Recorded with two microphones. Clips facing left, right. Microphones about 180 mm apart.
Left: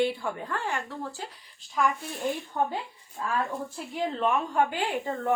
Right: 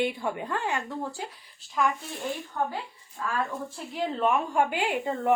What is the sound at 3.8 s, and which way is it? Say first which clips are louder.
A woman's voice: right 1 dB; centre (ahead or behind).